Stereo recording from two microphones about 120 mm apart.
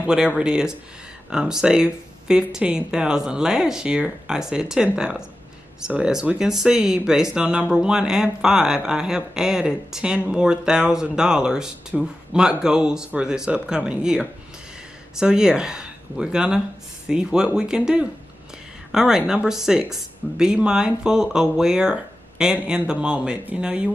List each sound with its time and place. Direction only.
0.0 s speech: 10° right (ahead or behind)